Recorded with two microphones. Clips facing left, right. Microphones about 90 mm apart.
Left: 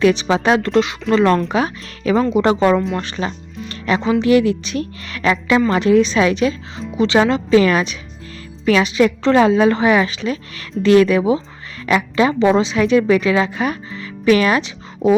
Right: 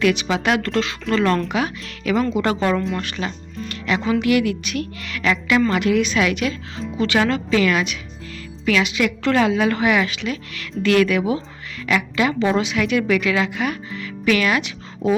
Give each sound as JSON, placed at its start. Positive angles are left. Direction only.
{"t": 0.0, "sound": "a woman's voice", "side_deg": 30}
{"t": 2.2, "sound": "a woman's voice", "side_deg": 20}
{"t": 3.7, "sound": "music", "side_deg": 35}
{"t": 4.1, "sound": "a woman's voice", "side_deg": 30}
{"t": 15.0, "sound": "music", "side_deg": 25}